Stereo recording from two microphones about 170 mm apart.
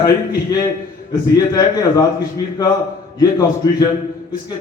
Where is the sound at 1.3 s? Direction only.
20° left (ahead or behind).